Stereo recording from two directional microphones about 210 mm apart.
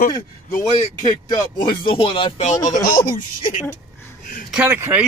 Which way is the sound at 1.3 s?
25° left (ahead or behind).